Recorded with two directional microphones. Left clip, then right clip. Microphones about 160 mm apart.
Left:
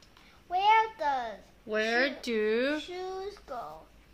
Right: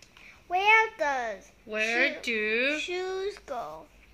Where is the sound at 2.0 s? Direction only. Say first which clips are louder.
Right 2 dB; 35° left (ahead or behind).